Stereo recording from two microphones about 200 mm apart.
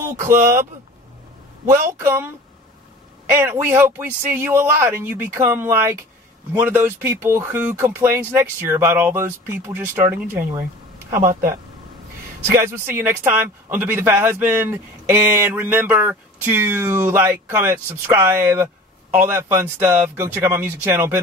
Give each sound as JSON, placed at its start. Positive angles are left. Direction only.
{"t": 1.7, "sound": "speech", "side_deg": -10}
{"t": 12.4, "sound": "speech", "side_deg": -10}